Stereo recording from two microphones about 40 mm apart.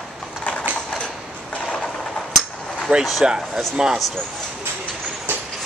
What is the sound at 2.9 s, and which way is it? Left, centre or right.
Speech, right.